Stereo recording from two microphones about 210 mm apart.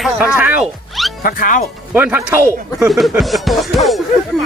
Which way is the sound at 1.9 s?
10° right (ahead or behind).